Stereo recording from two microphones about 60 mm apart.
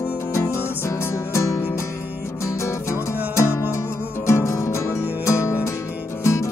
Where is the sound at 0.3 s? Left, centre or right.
Left.